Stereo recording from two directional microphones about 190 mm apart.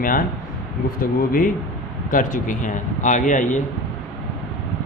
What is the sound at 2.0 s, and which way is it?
Speech, 45° left (ahead or behind).